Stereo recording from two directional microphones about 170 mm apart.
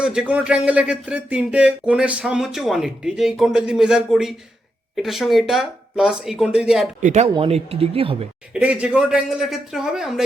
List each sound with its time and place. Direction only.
0.0 s speech: 5° right (ahead or behind)
7.0 s speech: 40° right (ahead or behind)
8.5 s speech: 10° right (ahead or behind)